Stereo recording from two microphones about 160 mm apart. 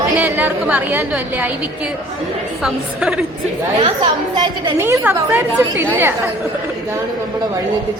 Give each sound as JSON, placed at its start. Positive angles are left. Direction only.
{"t": 0.2, "sound": "a woman's voice", "side_deg": -10}
{"t": 2.6, "sound": "a woman's voice", "side_deg": -5}
{"t": 3.8, "sound": "a woman's voice", "side_deg": -35}
{"t": 4.8, "sound": "a woman's voice", "side_deg": -15}